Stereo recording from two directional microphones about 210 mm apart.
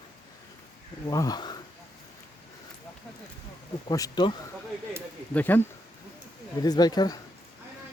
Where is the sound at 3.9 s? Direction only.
20° left (ahead or behind).